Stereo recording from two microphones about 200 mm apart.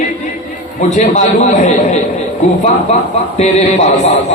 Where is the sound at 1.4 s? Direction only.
35° left (ahead or behind).